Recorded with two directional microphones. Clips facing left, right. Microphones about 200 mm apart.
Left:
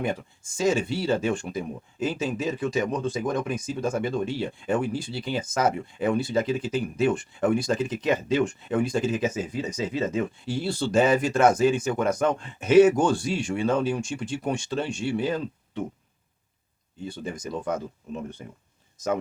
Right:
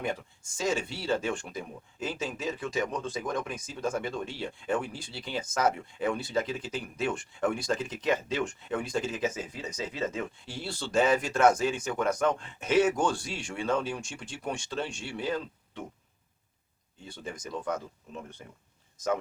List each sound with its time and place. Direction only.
0.0 s speech: 10° left (ahead or behind)
17.2 s speech: 20° left (ahead or behind)